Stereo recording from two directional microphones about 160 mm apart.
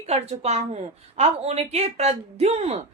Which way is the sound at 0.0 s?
40° right (ahead or behind).